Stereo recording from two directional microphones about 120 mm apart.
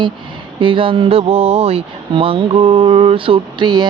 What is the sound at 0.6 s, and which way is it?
Speech, 45° right (ahead or behind).